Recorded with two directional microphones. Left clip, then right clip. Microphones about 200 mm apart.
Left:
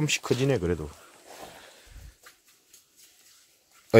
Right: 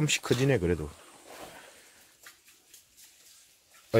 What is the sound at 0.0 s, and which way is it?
Speech, 5° left (ahead or behind).